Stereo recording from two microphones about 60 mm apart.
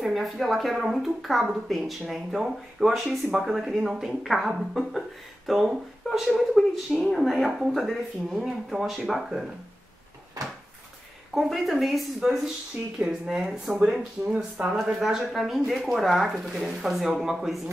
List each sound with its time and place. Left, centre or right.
0.0 s speech: centre
11.3 s speech: centre
12.2 s speech: centre
14.8 s speech: centre